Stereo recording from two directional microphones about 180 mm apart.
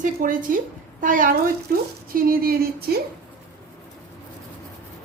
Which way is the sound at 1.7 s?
55° right (ahead or behind).